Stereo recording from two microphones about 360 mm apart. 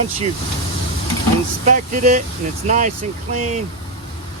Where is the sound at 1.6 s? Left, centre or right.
Centre.